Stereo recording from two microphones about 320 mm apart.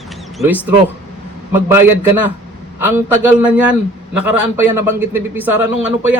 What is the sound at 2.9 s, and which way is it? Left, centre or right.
Speech, centre.